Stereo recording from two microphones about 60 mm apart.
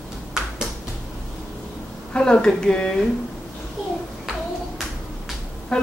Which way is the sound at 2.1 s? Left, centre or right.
Centre.